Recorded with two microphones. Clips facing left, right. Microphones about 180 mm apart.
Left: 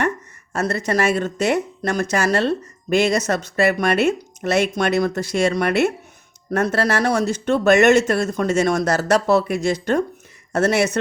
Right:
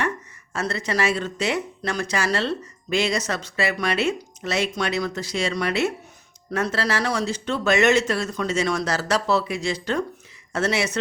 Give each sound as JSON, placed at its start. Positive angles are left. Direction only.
{"t": 0.5, "sound": "speech", "side_deg": 45}